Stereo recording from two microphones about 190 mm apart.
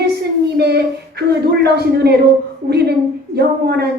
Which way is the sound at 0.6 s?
60° right (ahead or behind).